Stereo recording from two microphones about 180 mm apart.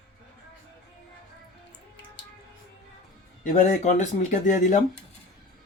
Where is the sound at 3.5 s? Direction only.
45° left (ahead or behind).